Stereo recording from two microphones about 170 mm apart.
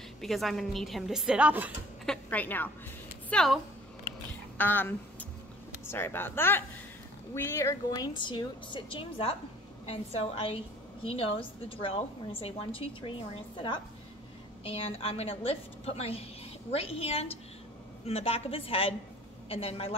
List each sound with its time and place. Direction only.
0.2 s a woman's voice: centre (ahead or behind)
2.0 s a woman's voice: 10° left (ahead or behind)
4.6 s a woman's voice: 10° left (ahead or behind); by 19.9 s 35° left (ahead or behind)